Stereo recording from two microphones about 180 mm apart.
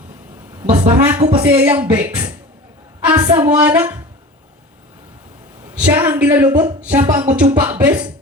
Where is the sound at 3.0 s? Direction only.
10° right (ahead or behind).